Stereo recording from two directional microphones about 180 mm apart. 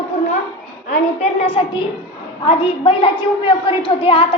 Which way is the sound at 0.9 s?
40° left (ahead or behind).